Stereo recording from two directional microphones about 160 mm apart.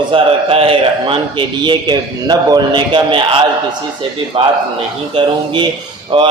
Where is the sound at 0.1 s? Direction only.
35° right (ahead or behind).